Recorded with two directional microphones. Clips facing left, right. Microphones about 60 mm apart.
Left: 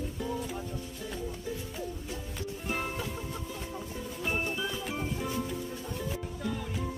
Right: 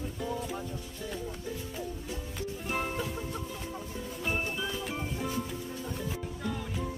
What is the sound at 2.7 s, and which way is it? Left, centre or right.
Music, centre.